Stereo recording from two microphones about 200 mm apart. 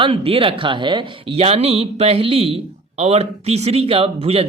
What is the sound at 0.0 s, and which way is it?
A man's voice, 25° right (ahead or behind).